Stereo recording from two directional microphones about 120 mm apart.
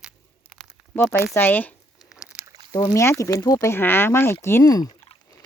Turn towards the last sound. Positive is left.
turn(degrees=30)  # may be behind; listen again after turning